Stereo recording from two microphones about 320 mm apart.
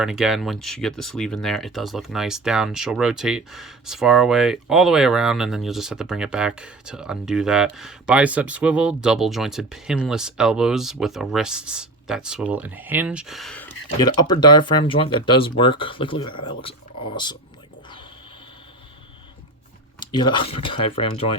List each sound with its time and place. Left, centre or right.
0.0 s speech: centre
20.0 s speech: centre